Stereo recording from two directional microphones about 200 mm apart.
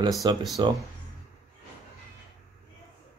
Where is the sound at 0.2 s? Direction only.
20° right (ahead or behind).